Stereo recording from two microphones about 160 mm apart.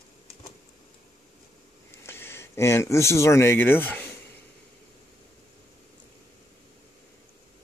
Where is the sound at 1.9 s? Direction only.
15° left (ahead or behind).